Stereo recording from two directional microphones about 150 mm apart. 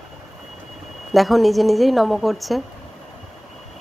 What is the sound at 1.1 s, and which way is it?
Speech, centre (ahead or behind).